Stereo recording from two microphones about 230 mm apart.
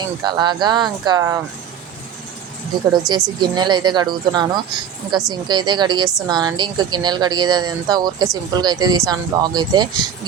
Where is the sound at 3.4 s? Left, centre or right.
Centre.